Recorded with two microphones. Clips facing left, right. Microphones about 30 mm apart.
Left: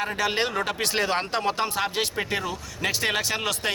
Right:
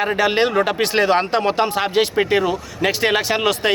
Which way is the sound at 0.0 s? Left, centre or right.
Right.